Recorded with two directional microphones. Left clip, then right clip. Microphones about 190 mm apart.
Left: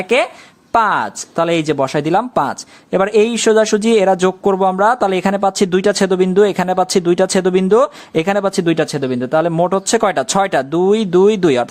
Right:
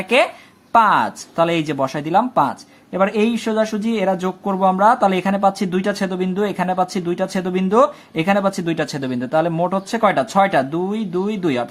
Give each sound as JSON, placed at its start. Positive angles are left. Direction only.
{"t": 0.1, "sound": "speech", "side_deg": 30}